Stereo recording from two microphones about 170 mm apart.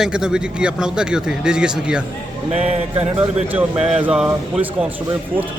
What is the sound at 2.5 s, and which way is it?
Speech, 35° right (ahead or behind).